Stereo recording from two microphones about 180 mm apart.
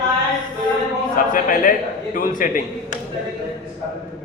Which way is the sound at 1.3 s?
50° left (ahead or behind).